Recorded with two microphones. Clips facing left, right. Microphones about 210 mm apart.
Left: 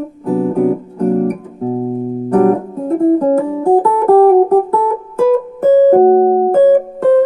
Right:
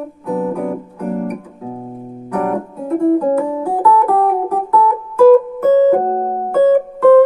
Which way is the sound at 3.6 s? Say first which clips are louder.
Left 4 dB; 50° left (ahead or behind).